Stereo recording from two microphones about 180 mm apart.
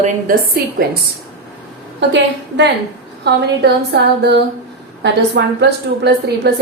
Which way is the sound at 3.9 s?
70° right (ahead or behind).